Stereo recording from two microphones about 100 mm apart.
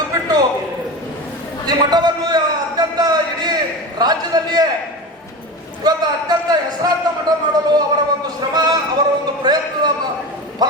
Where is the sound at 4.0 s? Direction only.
40° right (ahead or behind).